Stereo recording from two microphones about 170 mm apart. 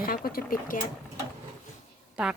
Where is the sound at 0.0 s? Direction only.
60° left (ahead or behind).